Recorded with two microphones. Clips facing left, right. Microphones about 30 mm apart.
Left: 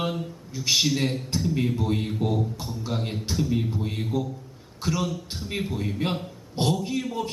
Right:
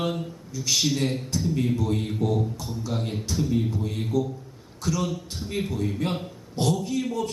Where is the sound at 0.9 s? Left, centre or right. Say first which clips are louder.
Even; centre.